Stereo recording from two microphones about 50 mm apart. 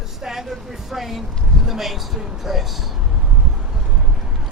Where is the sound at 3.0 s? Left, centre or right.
Centre.